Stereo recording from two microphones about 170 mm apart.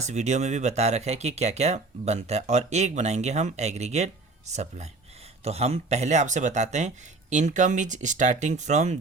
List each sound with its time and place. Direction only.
0.0 s speech: 40° right (ahead or behind)